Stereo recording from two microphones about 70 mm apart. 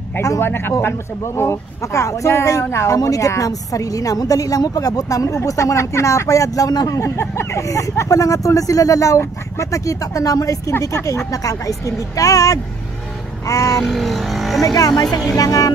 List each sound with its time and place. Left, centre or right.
0.4 s speech: left
3.0 s a woman's voice: left
6.9 s speech: left
13.7 s speech: centre
14.6 s a woman's voice: left